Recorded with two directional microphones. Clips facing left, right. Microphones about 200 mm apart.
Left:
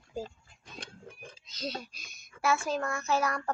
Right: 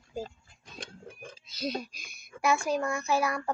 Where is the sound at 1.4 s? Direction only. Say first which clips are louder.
Right 4 dB; 10° right (ahead or behind).